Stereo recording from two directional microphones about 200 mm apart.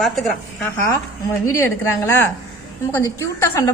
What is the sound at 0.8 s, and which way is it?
A woman's voice, 15° left (ahead or behind).